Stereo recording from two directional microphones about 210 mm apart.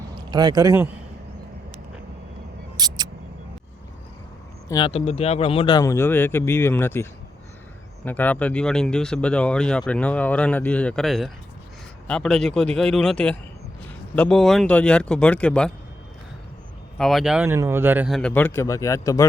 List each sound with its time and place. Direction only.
0.3 s speech: 20° right (ahead or behind)
2.7 s single-lens reflex camera: 20° right (ahead or behind)
4.7 s speech: 25° left (ahead or behind); by 15.7 s 5° left (ahead or behind)
17.0 s speech: centre (ahead or behind)
18.2 s speech: 5° left (ahead or behind)